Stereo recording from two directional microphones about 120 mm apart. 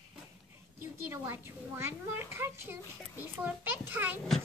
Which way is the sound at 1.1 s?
20° right (ahead or behind).